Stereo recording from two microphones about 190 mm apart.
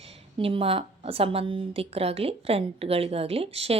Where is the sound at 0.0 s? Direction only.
30° right (ahead or behind).